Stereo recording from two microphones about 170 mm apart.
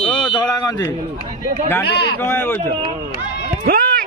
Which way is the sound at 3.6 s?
60° right (ahead or behind).